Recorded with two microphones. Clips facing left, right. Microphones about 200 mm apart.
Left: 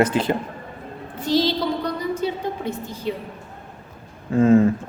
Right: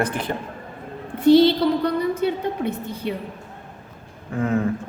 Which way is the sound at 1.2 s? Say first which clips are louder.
Right 7 dB; 60° right (ahead or behind).